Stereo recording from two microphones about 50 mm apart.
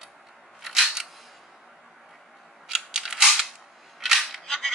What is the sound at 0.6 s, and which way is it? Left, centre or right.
Single-lens reflex camera, centre.